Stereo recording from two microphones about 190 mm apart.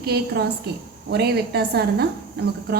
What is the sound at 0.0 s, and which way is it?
A woman's voice, 55° right (ahead or behind).